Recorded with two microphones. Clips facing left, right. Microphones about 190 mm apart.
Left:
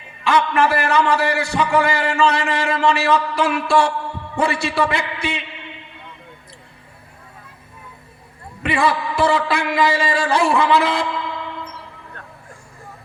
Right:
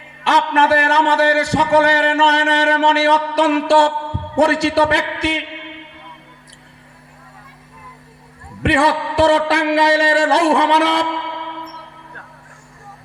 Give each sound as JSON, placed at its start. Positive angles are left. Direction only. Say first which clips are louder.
{"t": 0.5, "sound": "a man's voice", "louder": "right 2 dB", "side_deg": -75}
{"t": 8.6, "sound": "a man's voice", "louder": "right 3 dB", "side_deg": -75}